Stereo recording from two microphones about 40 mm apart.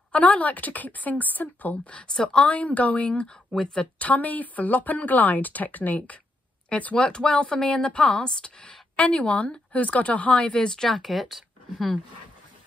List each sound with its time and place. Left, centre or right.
0.1 s speech: left
2.2 s speech: left
4.0 s speech: left
7.0 s a woman's voice: left
9.0 s speech: left
10.8 s speech: centre